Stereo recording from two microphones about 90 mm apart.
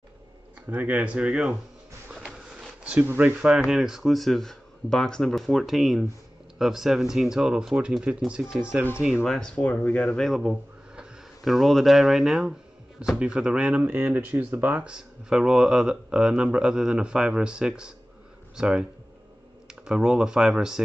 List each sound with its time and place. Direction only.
0.7 s speech: 20° right (ahead or behind)
2.1 s printer: 5° right (ahead or behind)
3.0 s speech: 25° right (ahead or behind)
3.3 s speech: 5° right (ahead or behind); by 10.0 s 15° left (ahead or behind)
10.0 s speech: 5° left (ahead or behind)
13.8 s speech: 20° right (ahead or behind)